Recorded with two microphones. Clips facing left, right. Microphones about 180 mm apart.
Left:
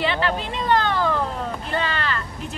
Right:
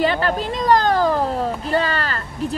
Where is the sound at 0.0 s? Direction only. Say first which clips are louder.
Right 4 dB; 40° right (ahead or behind).